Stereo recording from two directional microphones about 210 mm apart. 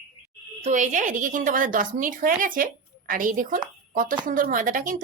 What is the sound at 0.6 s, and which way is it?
A woman's voice, 35° right (ahead or behind).